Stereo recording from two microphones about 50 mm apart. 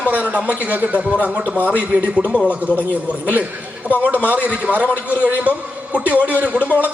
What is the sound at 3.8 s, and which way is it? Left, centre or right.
A man's voice, right.